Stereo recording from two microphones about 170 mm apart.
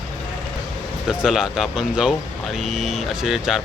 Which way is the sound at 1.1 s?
5° right (ahead or behind).